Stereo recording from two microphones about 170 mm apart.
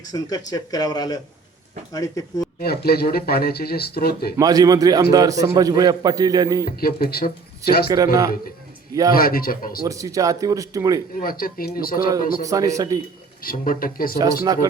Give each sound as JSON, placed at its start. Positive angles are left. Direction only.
{"t": 0.0, "sound": "speech", "side_deg": 20}
{"t": 2.6, "sound": "speech", "side_deg": 65}
{"t": 4.4, "sound": "a man's voice", "side_deg": -20}
{"t": 6.7, "sound": "speech", "side_deg": 60}
{"t": 7.9, "sound": "a man's voice", "side_deg": -20}
{"t": 9.1, "sound": "speech", "side_deg": 60}
{"t": 9.8, "sound": "a man's voice", "side_deg": -20}
{"t": 11.2, "sound": "speech", "side_deg": 60}
{"t": 12.4, "sound": "a man's voice", "side_deg": -20}
{"t": 13.4, "sound": "speech", "side_deg": 60}
{"t": 14.4, "sound": "a man's voice", "side_deg": -20}